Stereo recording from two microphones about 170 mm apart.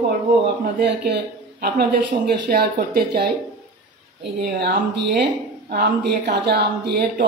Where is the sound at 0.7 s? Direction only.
75° right (ahead or behind).